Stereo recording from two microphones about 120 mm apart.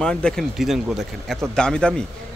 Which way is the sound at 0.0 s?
5° left (ahead or behind).